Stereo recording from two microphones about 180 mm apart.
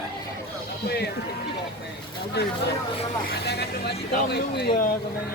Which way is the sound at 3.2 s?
65° left (ahead or behind).